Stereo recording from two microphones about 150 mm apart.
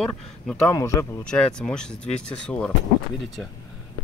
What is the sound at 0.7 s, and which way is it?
Speech, 20° left (ahead or behind).